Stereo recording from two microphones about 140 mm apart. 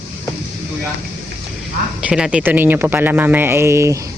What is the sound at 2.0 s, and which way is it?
Speech, 5° right (ahead or behind).